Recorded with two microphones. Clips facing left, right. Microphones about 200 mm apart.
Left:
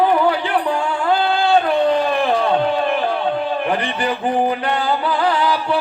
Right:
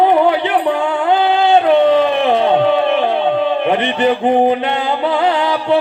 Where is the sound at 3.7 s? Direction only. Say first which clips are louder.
Right 6 dB; 25° right (ahead or behind).